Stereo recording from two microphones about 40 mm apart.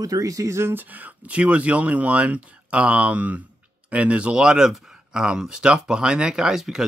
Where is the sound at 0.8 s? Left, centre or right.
Right.